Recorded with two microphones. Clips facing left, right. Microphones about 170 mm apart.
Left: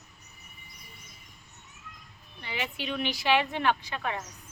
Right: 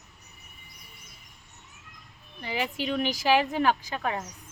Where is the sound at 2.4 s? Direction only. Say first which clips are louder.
Right 5 dB; 40° right (ahead or behind).